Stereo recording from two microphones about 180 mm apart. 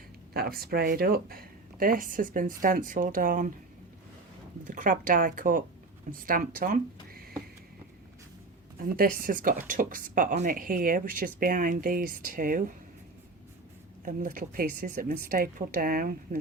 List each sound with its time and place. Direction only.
0.3 s a woman's voice: 55° right (ahead or behind)
4.6 s a woman's voice: 45° right (ahead or behind)
8.8 s a woman's voice: 50° right (ahead or behind)
14.0 s a woman's voice: 45° right (ahead or behind)